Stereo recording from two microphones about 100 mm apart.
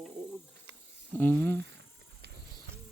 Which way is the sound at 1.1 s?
20° left (ahead or behind).